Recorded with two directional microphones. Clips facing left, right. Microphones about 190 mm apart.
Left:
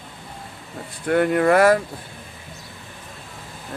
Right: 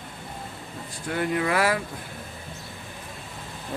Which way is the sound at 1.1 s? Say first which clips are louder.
Left 8 dB; 55° left (ahead or behind).